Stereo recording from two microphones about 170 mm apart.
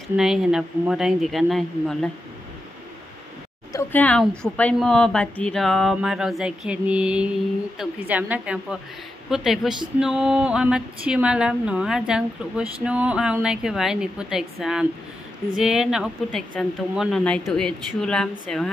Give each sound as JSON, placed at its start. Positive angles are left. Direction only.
{"t": 0.1, "sound": "a woman's voice", "side_deg": -5}
{"t": 3.7, "sound": "a woman's voice", "side_deg": 10}